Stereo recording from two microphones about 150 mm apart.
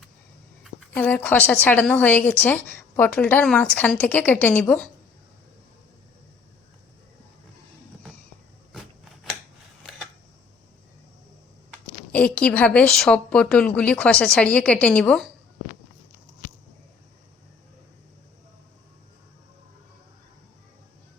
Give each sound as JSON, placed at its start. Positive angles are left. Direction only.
{"t": 0.9, "sound": "a woman's voice", "side_deg": 10}
{"t": 12.1, "sound": "a woman's voice", "side_deg": 10}